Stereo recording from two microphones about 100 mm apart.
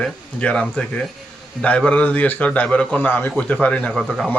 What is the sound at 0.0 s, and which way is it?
A man's voice, 10° left (ahead or behind).